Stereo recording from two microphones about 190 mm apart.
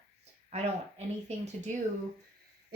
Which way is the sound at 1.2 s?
35° right (ahead or behind).